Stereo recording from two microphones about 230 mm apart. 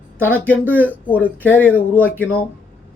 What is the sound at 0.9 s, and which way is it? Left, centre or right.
Speech, centre.